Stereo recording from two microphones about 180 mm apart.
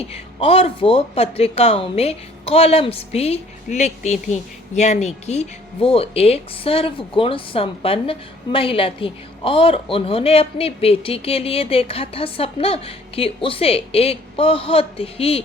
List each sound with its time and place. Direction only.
0.1 s a woman's voice: 30° left (ahead or behind)